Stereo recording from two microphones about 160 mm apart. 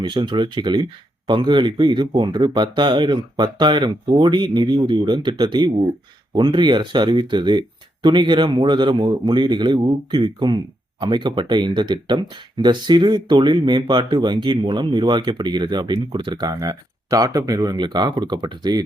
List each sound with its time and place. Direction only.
0.0 s speech: 30° right (ahead or behind)